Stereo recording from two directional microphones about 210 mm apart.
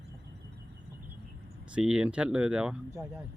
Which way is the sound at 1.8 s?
5° right (ahead or behind).